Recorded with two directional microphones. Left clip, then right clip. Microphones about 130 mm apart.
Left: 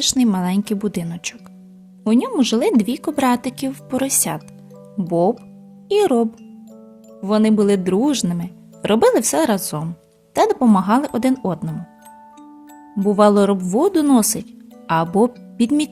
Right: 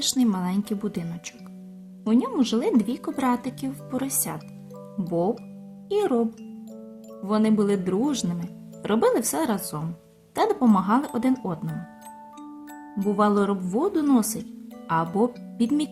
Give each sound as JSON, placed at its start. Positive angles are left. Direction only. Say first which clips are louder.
{"t": 0.0, "sound": "speech", "louder": "left 6 dB", "side_deg": 55}
{"t": 5.0, "sound": "speech", "louder": "left 7 dB", "side_deg": 45}
{"t": 5.9, "sound": "speech", "louder": "left 7 dB", "side_deg": 55}
{"t": 13.1, "sound": "speech", "louder": "left 8 dB", "side_deg": 55}
{"t": 14.8, "sound": "speech", "louder": "left 7 dB", "side_deg": 55}